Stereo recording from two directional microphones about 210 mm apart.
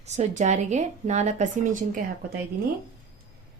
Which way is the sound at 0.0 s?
35° right (ahead or behind).